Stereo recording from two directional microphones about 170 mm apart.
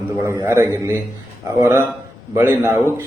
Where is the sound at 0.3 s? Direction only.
15° right (ahead or behind).